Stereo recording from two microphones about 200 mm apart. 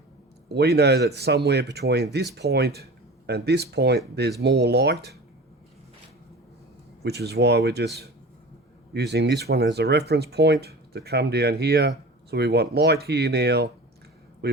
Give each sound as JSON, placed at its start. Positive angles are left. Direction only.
{"t": 0.4, "sound": "speech", "side_deg": -55}
{"t": 7.0, "sound": "speech", "side_deg": -55}
{"t": 8.9, "sound": "speech", "side_deg": -55}
{"t": 14.4, "sound": "a sound", "side_deg": -55}